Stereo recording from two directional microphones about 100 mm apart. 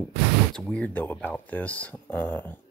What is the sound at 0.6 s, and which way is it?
Speech, 10° left (ahead or behind).